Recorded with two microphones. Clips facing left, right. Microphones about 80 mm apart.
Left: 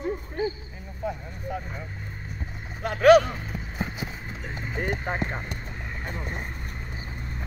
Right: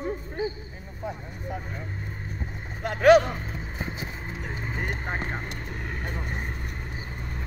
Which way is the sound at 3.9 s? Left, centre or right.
Right.